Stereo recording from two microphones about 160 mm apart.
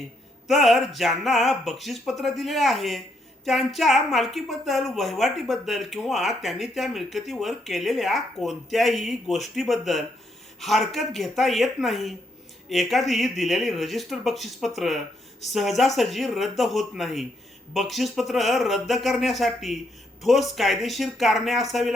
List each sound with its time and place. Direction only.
0.4 s a woman's voice: centre (ahead or behind)